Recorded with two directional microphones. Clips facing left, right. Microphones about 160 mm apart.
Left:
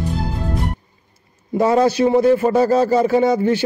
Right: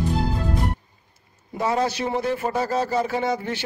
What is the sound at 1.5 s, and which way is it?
Speech, 40° left (ahead or behind).